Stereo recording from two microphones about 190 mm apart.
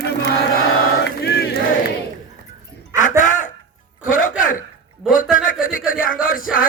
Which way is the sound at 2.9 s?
40° left (ahead or behind).